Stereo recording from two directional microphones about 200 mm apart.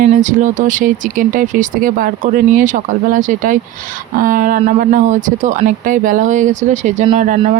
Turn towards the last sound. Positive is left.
turn(degrees=-40)  # may be behind; listen again after turning